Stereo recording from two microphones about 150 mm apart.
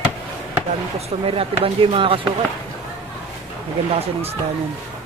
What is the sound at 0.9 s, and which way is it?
Speech, 40° right (ahead or behind).